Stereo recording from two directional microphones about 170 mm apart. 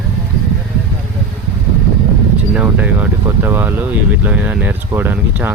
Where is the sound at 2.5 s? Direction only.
10° right (ahead or behind).